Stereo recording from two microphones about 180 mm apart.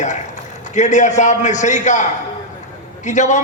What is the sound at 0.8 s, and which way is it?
A man's voice, 40° left (ahead or behind).